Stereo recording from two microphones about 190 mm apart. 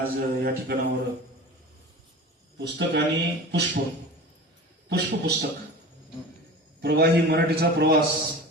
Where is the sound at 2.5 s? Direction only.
70° right (ahead or behind).